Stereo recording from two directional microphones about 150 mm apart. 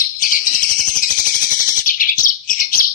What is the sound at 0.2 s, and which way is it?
Bird, 60° left (ahead or behind).